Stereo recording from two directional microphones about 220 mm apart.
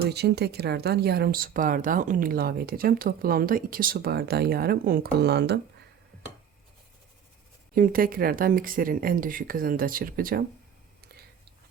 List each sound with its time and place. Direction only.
0.0 s speech: 50° right (ahead or behind)
7.8 s speech: 40° right (ahead or behind)